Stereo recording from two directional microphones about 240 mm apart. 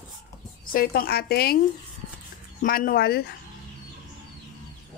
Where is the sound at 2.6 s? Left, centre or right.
Left.